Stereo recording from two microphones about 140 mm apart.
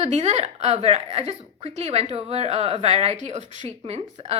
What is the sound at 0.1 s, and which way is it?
A woman's voice, 50° right (ahead or behind).